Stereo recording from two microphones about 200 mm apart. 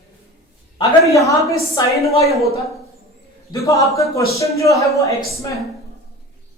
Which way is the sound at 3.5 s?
15° left (ahead or behind).